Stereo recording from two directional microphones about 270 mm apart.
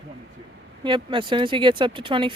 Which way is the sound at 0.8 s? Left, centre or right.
Centre.